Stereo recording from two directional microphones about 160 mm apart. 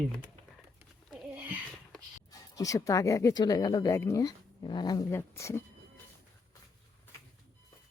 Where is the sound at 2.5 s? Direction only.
20° left (ahead or behind).